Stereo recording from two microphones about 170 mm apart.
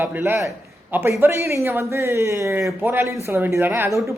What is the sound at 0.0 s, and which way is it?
Speech, 10° right (ahead or behind).